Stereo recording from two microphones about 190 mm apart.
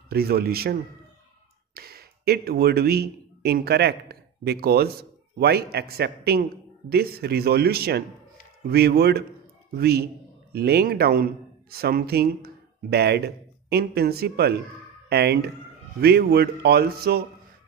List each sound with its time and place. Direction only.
0.1 s a man's voice: 55° right (ahead or behind)